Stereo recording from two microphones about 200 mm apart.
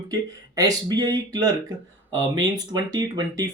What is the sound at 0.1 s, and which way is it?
Speech, 20° right (ahead or behind).